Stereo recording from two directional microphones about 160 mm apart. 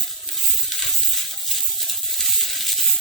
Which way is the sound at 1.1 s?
Centre (ahead or behind).